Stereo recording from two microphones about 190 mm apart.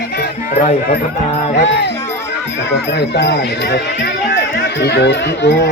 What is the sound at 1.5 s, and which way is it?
Speech, 70° left (ahead or behind).